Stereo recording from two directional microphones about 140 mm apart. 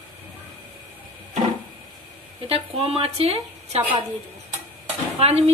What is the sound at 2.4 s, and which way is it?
Speech, 45° right (ahead or behind).